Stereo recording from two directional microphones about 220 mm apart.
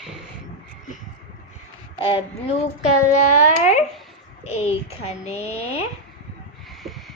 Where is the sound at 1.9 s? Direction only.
25° left (ahead or behind).